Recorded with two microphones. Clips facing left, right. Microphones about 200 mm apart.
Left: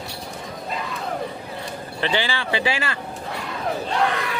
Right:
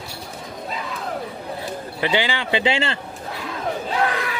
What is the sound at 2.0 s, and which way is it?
Speech, 15° right (ahead or behind).